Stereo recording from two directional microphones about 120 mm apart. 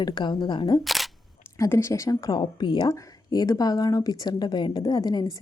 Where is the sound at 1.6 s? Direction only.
20° left (ahead or behind).